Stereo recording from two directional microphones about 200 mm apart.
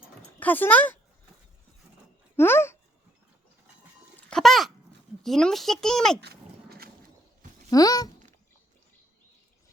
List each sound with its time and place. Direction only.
0.3 s speech: 10° left (ahead or behind)
2.3 s babbling: 10° left (ahead or behind)
4.2 s a sound: 5° left (ahead or behind)
5.2 s speech: centre (ahead or behind)
6.1 s dog: 50° right (ahead or behind)
7.7 s a sound: 15° left (ahead or behind)